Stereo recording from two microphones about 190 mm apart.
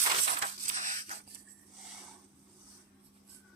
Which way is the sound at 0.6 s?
40° right (ahead or behind).